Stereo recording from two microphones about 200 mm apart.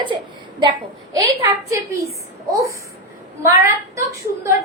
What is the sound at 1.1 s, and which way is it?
Speech, 15° right (ahead or behind).